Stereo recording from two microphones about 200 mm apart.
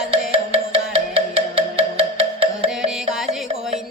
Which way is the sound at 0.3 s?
30° right (ahead or behind).